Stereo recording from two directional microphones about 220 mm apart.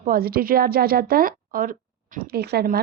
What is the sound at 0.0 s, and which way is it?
A woman's voice, 40° right (ahead or behind).